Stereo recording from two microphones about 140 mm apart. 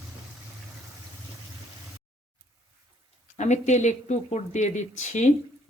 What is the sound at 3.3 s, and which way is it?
Speech, 55° left (ahead or behind).